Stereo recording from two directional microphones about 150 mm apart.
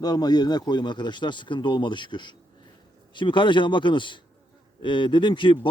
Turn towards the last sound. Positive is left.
turn(degrees=35)  # may be behind; listen again after turning